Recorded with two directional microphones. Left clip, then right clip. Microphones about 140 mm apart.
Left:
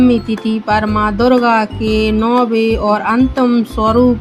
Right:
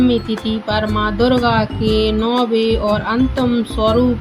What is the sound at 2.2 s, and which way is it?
Music, 35° left (ahead or behind).